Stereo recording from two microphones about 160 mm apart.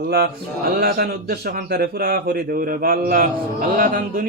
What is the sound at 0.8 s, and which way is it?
A man's voice, 80° right.